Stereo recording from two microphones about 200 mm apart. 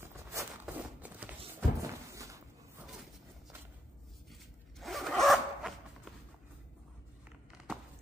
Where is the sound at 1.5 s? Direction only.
15° right (ahead or behind).